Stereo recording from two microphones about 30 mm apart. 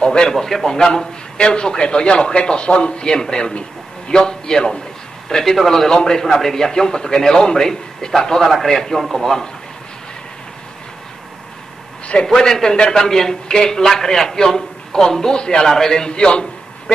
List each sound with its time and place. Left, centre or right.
0.0 s a man's voice: left
5.3 s a man's voice: centre
5.9 s a man's voice: left
12.1 s a man's voice: left
12.9 s a man's voice: centre
16.1 s a man's voice: left